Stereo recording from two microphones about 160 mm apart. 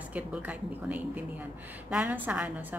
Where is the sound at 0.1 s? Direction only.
10° right (ahead or behind).